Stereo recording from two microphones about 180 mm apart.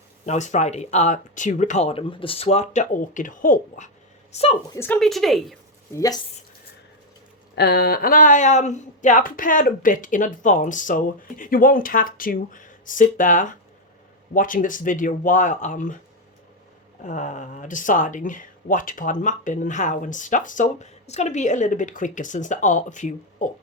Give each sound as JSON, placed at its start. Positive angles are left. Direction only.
{"t": 0.3, "sound": "speech", "side_deg": 40}
{"t": 4.3, "sound": "a woman's voice", "side_deg": 35}
{"t": 4.7, "sound": "speech", "side_deg": 15}
{"t": 4.9, "sound": "speech", "side_deg": 0}
{"t": 5.9, "sound": "speech", "side_deg": 20}
{"t": 7.5, "sound": "speech", "side_deg": 65}
{"t": 17.0, "sound": "speech", "side_deg": 45}